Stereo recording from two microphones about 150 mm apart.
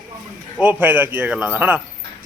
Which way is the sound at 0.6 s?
10° right (ahead or behind).